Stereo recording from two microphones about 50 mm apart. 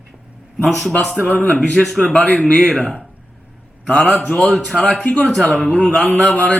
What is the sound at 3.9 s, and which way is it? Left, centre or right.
A man's voice, left.